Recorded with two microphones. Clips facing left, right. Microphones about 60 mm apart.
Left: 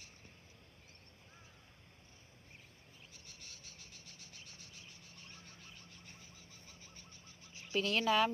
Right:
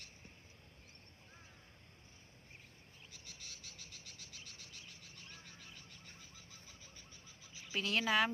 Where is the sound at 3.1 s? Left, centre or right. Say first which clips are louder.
Right 4 dB; right.